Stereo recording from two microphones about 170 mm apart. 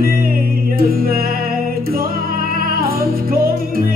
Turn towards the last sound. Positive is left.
turn(degrees=-60)  # may be behind; listen again after turning